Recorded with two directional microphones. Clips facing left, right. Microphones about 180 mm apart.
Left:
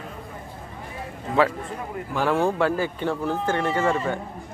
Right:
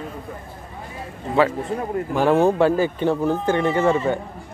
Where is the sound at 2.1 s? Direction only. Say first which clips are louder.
Right 5 dB; 20° right (ahead or behind).